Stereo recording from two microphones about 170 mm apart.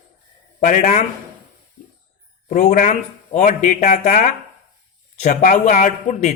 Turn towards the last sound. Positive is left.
turn(degrees=45)  # may be behind; listen again after turning